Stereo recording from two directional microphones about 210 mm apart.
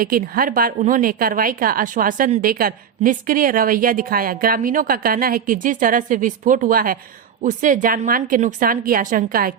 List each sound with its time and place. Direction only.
0.0 s a woman's voice: 45° right (ahead or behind)